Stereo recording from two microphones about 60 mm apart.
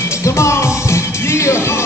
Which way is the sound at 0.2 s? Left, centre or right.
Left.